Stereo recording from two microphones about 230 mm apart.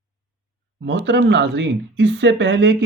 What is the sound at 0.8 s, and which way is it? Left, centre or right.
Speech, right.